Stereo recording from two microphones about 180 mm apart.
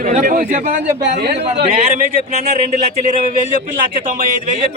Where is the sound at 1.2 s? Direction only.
60° right (ahead or behind).